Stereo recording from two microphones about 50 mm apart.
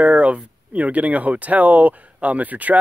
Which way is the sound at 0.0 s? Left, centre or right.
Right.